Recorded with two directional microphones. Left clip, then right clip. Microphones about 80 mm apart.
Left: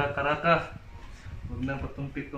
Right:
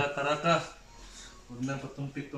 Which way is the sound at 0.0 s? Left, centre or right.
Right.